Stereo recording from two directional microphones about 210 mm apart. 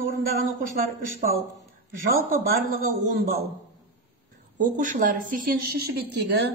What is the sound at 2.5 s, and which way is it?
Speech, 45° right (ahead or behind).